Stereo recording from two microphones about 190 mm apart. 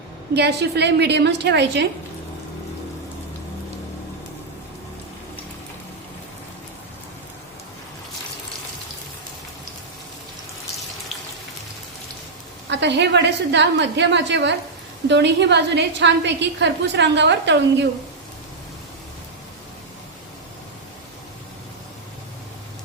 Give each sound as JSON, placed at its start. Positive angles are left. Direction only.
{"t": 0.3, "sound": "a woman's voice", "side_deg": -60}
{"t": 12.6, "sound": "a woman's voice", "side_deg": -65}